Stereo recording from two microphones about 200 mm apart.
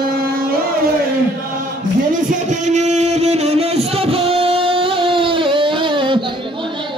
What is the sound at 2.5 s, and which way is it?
Music, 35° right (ahead or behind).